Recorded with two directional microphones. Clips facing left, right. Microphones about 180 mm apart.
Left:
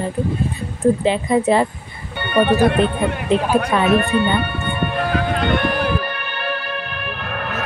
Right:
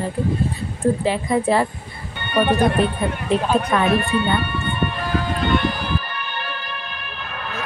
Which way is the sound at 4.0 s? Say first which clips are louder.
Left 3 dB; 60° left (ahead or behind).